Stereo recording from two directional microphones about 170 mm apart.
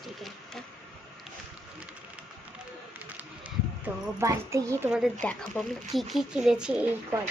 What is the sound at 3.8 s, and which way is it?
Speech, 15° right (ahead or behind).